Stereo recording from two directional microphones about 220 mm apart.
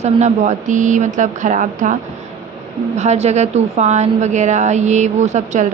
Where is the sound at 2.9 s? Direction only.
30° right (ahead or behind).